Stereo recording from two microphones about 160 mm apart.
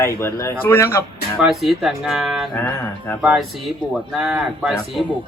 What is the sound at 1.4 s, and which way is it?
Speech, centre (ahead or behind).